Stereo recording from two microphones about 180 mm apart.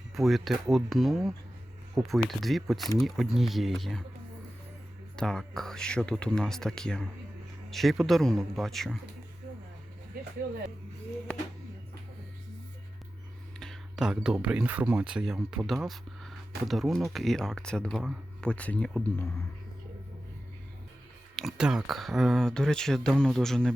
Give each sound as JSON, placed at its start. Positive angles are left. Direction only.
{"t": 0.1, "sound": "speech", "side_deg": 0}
{"t": 5.1, "sound": "speech", "side_deg": 5}
{"t": 10.1, "sound": "a sound", "side_deg": -55}
{"t": 13.6, "sound": "whispering", "side_deg": 0}
{"t": 14.4, "sound": "speech", "side_deg": -5}
{"t": 21.3, "sound": "speech", "side_deg": 0}